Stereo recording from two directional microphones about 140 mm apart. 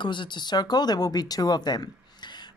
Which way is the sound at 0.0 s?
35° left (ahead or behind).